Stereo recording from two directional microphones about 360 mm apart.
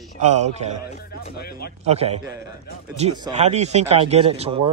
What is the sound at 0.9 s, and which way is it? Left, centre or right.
Speech, left.